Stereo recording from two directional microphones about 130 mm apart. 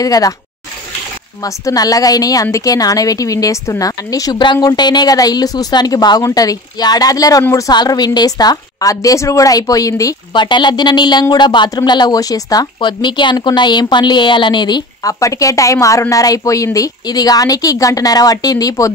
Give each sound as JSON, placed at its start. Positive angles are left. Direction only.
{"t": 0.0, "sound": "a woman's voice", "side_deg": 30}
{"t": 1.4, "sound": "a woman's voice", "side_deg": 30}